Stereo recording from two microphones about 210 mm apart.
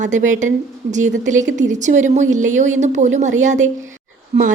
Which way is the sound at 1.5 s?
35° right (ahead or behind).